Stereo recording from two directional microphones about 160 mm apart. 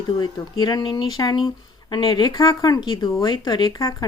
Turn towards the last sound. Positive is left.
turn(degrees=20)  # may be behind; listen again after turning